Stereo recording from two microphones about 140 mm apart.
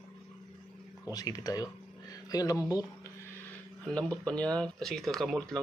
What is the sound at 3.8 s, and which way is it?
Speech, 5° left (ahead or behind).